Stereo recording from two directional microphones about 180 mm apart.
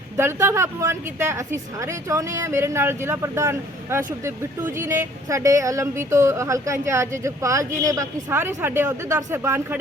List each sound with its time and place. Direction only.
0.2 s speech: 15° right (ahead or behind)